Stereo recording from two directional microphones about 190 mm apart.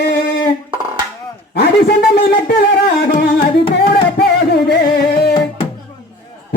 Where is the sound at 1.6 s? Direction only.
55° left (ahead or behind).